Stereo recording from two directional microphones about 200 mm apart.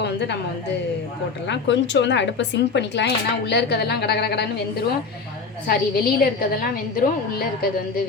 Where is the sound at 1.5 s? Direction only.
65° left (ahead or behind).